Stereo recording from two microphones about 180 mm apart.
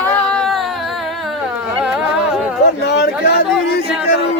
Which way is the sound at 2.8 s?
65° left (ahead or behind).